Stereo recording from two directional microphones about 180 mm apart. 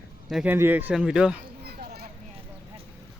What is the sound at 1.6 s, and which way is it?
Children playing, 60° right (ahead or behind).